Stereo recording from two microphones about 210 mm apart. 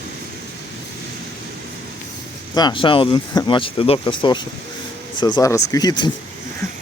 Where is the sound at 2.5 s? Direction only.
20° left (ahead or behind).